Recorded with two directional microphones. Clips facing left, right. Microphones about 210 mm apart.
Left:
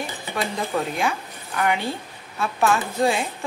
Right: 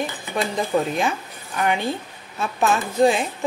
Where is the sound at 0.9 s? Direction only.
20° right (ahead or behind).